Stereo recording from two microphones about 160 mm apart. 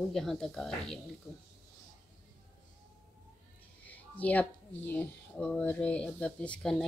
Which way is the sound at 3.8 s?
10° left (ahead or behind).